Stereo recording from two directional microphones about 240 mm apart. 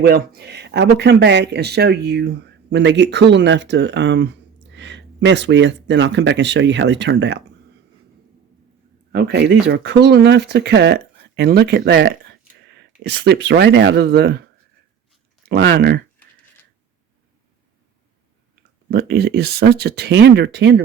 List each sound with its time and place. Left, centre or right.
0.0 s speech: right
9.1 s speech: right
15.4 s speech: right
18.9 s speech: right